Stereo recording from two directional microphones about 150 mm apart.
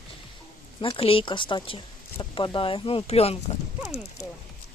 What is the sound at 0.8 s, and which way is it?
Speech, 35° left (ahead or behind).